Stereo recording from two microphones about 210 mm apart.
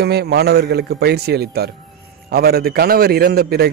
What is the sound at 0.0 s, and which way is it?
A man's voice, 50° right (ahead or behind).